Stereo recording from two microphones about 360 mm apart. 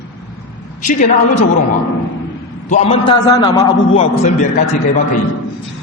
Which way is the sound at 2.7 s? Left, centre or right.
Centre.